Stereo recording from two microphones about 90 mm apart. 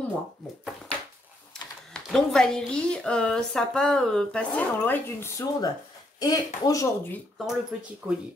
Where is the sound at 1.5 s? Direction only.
5° left (ahead or behind).